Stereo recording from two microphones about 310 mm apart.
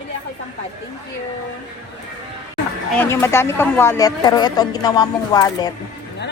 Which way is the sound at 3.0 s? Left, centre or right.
Centre.